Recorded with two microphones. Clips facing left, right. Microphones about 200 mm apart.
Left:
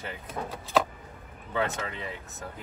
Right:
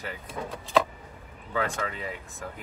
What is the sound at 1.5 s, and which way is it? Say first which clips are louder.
Speech: even; 25° left (ahead or behind).